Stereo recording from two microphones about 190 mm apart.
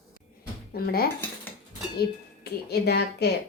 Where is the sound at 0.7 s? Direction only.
55° left (ahead or behind).